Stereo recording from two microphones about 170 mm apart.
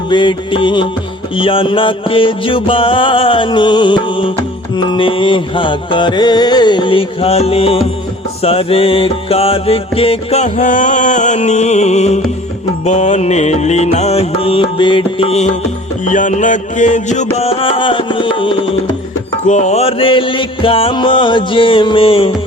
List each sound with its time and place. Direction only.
0.1 s music: 30° left (ahead or behind)
16.0 s music: 45° left (ahead or behind)
17.3 s music: 35° left (ahead or behind)
19.5 s music: 45° left (ahead or behind)